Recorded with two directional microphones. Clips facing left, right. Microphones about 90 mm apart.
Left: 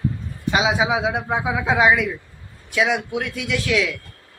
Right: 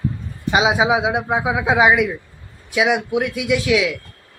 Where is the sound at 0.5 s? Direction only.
20° right (ahead or behind).